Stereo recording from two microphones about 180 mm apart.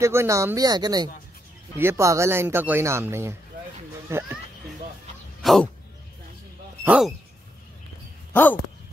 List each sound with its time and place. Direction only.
0.0 s speech: 15° right (ahead or behind)
5.4 s a sound: centre (ahead or behind)
6.8 s speech: 5° right (ahead or behind)
8.3 s speech: 10° left (ahead or behind)